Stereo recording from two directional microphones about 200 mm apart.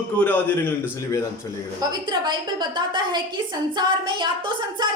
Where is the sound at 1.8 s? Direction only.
20° right (ahead or behind).